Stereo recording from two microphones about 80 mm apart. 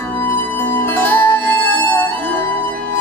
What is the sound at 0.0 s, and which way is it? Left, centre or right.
Music, left.